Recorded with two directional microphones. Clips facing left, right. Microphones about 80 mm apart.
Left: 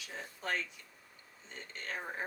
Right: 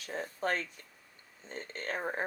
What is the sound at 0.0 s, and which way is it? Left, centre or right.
Speech, right.